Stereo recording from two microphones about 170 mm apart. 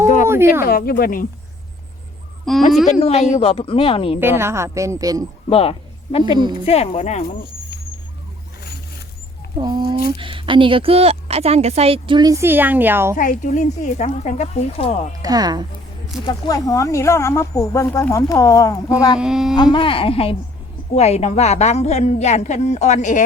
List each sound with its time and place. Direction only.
0.3 s a sound: 15° right (ahead or behind)
0.6 s speech: 60° left (ahead or behind)
2.4 s speech: centre (ahead or behind)
2.8 s a woman's voice: 40° left (ahead or behind)
4.2 s speech: 15° right (ahead or behind)
5.5 s a woman's voice: 35° left (ahead or behind)
9.6 s speech: 25° right (ahead or behind)
13.1 s a woman's voice: 50° left (ahead or behind)
15.2 s speech: 20° right (ahead or behind)
16.2 s speech: 25° left (ahead or behind)
19.2 s speech: 5° right (ahead or behind)
19.7 s a woman's voice: 30° left (ahead or behind)